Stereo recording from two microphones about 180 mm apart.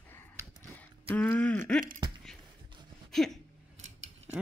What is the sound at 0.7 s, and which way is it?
Speech, 10° left (ahead or behind).